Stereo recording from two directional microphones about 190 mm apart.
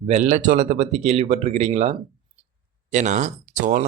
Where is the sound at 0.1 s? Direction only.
40° right (ahead or behind).